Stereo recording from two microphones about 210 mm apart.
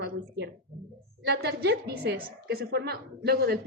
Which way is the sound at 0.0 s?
55° right (ahead or behind).